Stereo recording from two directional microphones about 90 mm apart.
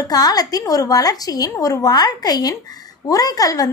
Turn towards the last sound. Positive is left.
turn(degrees=40)  # may be behind; listen again after turning